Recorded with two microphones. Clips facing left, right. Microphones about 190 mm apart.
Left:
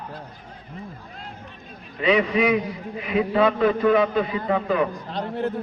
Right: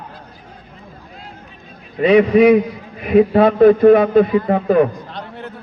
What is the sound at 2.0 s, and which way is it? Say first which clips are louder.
A man's voice: right 9 dB; 40° right (ahead or behind).